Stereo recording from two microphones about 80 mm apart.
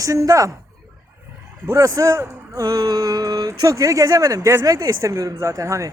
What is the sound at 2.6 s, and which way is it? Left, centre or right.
Speech, right.